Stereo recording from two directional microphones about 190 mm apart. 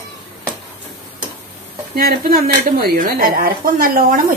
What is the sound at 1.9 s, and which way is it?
A woman's voice, 50° right (ahead or behind).